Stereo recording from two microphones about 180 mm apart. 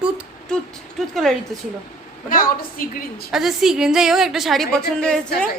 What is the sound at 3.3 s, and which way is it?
A woman's voice, centre (ahead or behind).